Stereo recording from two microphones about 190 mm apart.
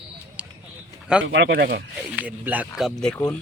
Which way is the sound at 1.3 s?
65° right (ahead or behind).